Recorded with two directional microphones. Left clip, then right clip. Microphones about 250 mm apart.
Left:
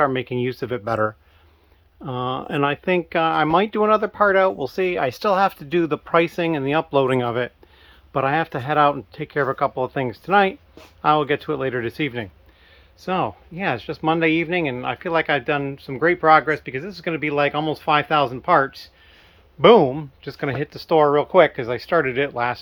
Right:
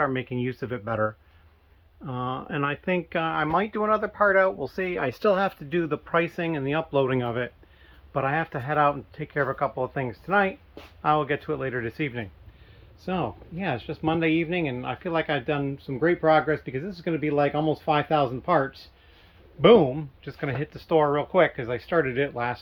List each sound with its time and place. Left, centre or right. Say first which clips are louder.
0.0 s speech: left 6 dB; left